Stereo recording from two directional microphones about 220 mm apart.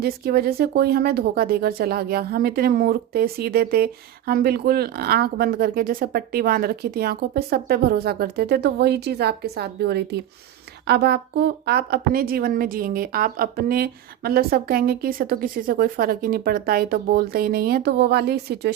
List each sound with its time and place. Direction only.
0.0 s a woman's voice: 45° right (ahead or behind)